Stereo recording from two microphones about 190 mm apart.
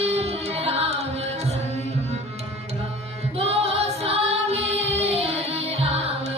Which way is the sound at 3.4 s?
30° right (ahead or behind).